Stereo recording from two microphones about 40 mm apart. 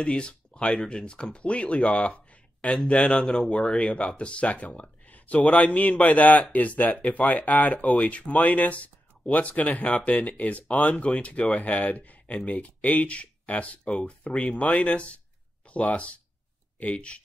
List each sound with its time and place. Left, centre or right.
0.0 s speech: left